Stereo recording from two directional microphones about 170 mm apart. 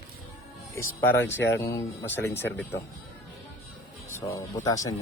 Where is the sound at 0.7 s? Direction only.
15° left (ahead or behind).